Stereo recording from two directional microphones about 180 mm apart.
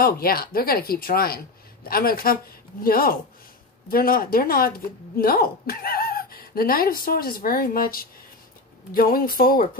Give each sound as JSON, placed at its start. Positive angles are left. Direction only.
{"t": 0.0, "sound": "speech", "side_deg": 55}